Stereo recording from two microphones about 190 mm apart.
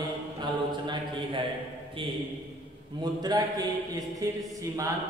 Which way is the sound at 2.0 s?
25° right (ahead or behind).